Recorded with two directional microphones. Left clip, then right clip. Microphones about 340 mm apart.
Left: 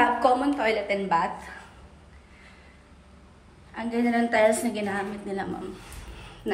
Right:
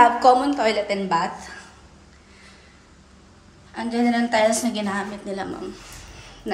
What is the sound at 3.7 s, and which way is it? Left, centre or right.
A woman's voice, centre.